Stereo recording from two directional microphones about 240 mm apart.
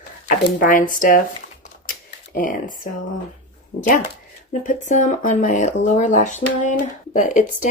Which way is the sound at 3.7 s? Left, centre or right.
Left.